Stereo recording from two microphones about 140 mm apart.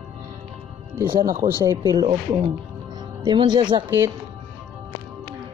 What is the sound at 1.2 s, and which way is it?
Speech, 80° right.